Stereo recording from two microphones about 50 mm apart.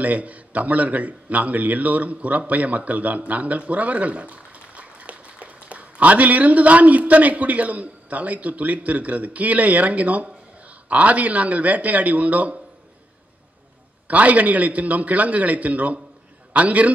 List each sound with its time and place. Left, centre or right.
0.0 s speech: right
14.0 s speech: right